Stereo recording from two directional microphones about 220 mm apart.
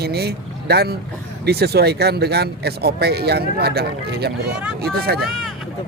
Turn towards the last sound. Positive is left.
turn(degrees=-45)  # may be behind; listen again after turning